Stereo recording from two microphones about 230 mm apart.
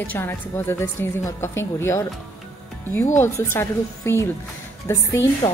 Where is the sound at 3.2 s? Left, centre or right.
Centre.